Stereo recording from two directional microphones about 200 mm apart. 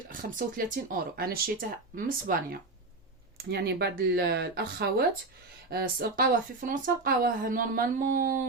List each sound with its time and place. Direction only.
0.1 s speech: 45° right (ahead or behind)